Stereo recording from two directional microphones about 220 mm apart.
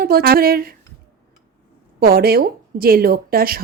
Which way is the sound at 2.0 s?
45° right (ahead or behind).